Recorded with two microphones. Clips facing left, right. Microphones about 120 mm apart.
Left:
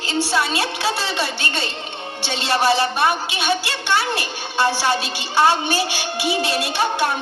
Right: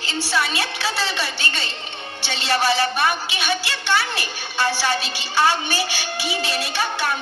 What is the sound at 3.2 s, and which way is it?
Music, 55° left (ahead or behind).